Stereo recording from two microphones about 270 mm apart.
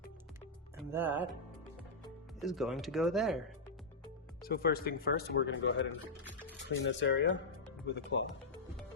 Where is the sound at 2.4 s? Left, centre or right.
Centre.